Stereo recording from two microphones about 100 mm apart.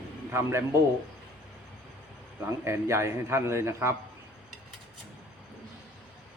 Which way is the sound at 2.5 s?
30° right (ahead or behind).